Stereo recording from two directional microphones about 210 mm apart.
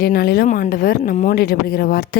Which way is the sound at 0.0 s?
45° left (ahead or behind).